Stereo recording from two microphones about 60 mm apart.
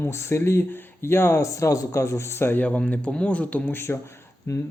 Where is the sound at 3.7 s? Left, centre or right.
Left.